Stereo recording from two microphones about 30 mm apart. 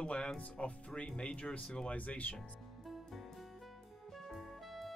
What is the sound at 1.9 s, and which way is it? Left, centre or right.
Speech, left.